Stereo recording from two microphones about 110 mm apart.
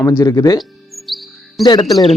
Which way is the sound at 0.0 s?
25° left (ahead or behind).